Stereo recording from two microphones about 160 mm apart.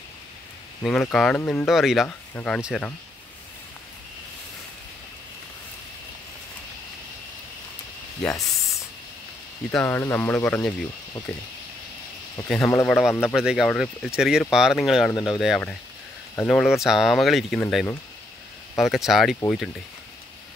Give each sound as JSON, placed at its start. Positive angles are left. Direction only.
{"t": 0.8, "sound": "speech", "side_deg": 5}
{"t": 1.7, "sound": "speech", "side_deg": 0}
{"t": 2.4, "sound": "speech", "side_deg": 10}
{"t": 8.3, "sound": "a sound", "side_deg": 20}
{"t": 9.7, "sound": "speech", "side_deg": 10}
{"t": 12.5, "sound": "speech", "side_deg": 15}
{"t": 13.3, "sound": "speech", "side_deg": -5}